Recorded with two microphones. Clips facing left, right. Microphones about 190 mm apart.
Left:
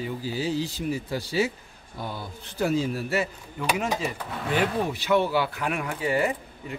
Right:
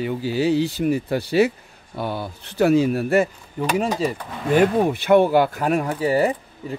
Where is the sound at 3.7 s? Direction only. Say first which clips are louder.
Right 6 dB; 35° right (ahead or behind).